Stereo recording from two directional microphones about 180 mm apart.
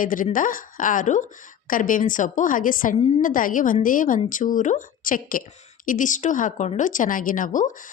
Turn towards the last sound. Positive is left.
turn(degrees=45)  # may be behind; listen again after turning